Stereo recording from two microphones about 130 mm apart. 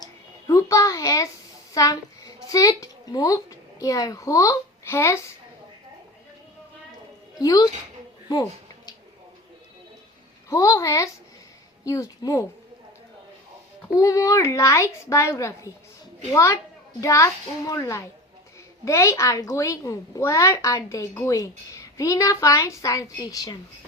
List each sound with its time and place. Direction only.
0.0 s a sound: 25° left (ahead or behind)
1.7 s a woman's voice: 30° left (ahead or behind)
7.4 s a woman's voice: 25° left (ahead or behind)
10.5 s a woman's voice: 25° left (ahead or behind)
14.0 s a woman's voice: 25° left (ahead or behind)